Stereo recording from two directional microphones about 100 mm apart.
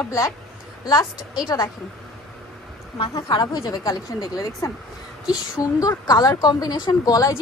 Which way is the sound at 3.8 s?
35° left (ahead or behind).